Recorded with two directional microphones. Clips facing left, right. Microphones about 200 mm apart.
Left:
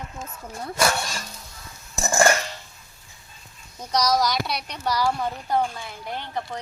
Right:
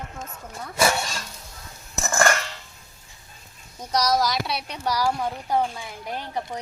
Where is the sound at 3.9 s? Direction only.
Centre (ahead or behind).